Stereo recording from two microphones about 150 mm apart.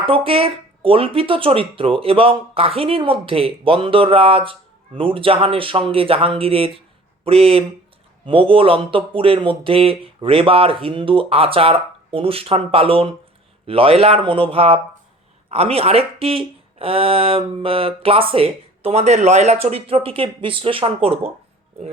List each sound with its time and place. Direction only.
0.0 s speech: 40° right (ahead or behind)